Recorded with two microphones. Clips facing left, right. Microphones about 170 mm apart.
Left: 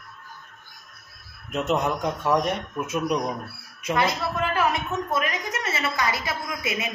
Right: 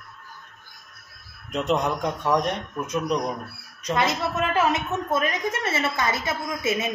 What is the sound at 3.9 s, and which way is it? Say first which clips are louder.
A woman's voice: even; 20° right (ahead or behind).